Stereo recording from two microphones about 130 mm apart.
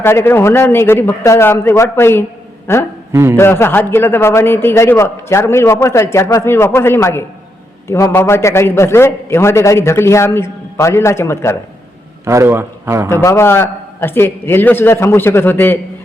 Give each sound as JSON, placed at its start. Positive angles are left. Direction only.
{"t": 0.0, "sound": "a man's voice", "side_deg": 20}
{"t": 3.1, "sound": "a man's voice", "side_deg": -20}
{"t": 3.3, "sound": "a man's voice", "side_deg": 20}
{"t": 12.2, "sound": "a man's voice", "side_deg": -20}
{"t": 13.1, "sound": "a man's voice", "side_deg": 20}